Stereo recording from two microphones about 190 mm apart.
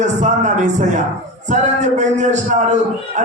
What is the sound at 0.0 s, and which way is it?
Speech, 40° right (ahead or behind).